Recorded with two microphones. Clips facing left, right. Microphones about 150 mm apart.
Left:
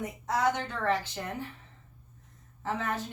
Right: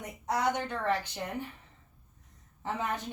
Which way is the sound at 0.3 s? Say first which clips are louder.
Left 1 dB; 15° right (ahead or behind).